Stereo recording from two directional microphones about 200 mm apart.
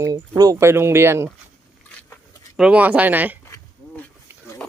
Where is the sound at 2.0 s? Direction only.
10° left (ahead or behind).